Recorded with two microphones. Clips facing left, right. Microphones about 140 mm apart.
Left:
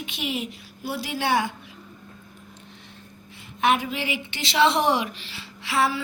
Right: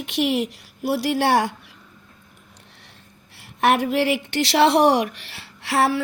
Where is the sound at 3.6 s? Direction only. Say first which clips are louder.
Right 5 dB; 70° right (ahead or behind).